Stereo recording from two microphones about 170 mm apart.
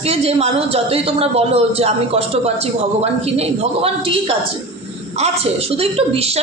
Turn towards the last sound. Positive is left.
turn(degrees=-35)  # may be behind; listen again after turning